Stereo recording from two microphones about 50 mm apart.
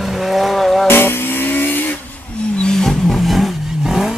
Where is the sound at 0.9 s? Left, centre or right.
Left.